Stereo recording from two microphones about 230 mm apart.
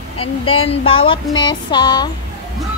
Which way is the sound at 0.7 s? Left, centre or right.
Left.